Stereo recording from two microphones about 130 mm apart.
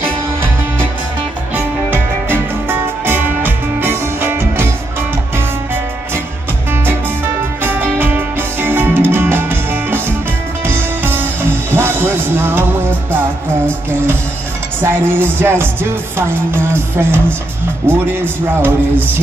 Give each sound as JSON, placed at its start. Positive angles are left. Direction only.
{"t": 1.5, "sound": "music", "side_deg": -15}
{"t": 7.6, "sound": "music", "side_deg": -15}